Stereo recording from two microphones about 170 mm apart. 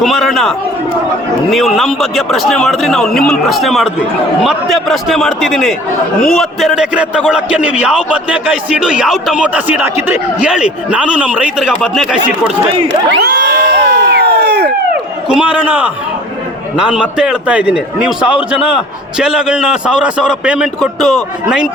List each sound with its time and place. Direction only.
0.0 s a man's voice: centre (ahead or behind)
12.9 s crowd: 85° right
15.3 s a man's voice: 5° right (ahead or behind)